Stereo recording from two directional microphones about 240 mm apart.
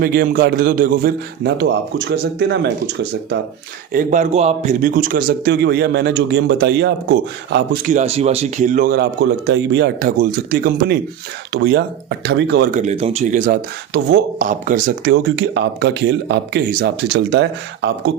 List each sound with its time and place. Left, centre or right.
0.0 s a man's voice: right
3.9 s a man's voice: right